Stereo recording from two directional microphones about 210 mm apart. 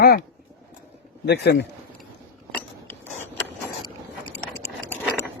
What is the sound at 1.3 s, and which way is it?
Speech, 55° left (ahead or behind).